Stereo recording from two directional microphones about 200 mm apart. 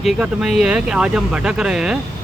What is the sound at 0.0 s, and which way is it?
Speech, centre (ahead or behind).